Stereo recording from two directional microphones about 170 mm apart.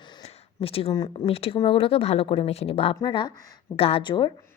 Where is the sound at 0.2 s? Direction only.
35° left (ahead or behind).